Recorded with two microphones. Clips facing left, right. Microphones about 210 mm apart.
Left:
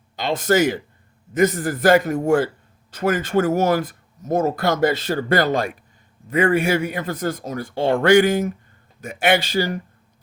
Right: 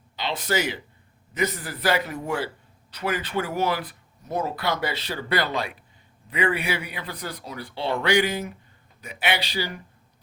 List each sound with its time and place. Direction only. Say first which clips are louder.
0.2 s speech: left 8 dB; 45° left (ahead or behind)